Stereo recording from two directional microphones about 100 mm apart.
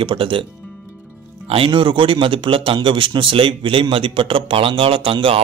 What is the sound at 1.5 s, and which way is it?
Speech, 60° right (ahead or behind).